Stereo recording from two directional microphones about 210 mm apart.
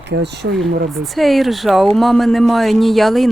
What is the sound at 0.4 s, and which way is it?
Speech, 70° right (ahead or behind).